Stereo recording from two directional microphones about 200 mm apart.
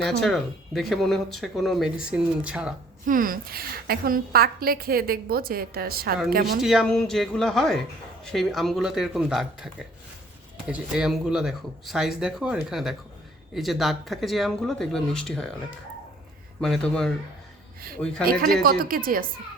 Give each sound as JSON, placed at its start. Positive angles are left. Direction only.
{"t": 0.0, "sound": "speech", "side_deg": 0}
{"t": 3.1, "sound": "a woman's voice", "side_deg": -45}
{"t": 6.6, "sound": "speech", "side_deg": 0}
{"t": 16.6, "sound": "speech", "side_deg": 5}
{"t": 18.2, "sound": "a woman's voice", "side_deg": -50}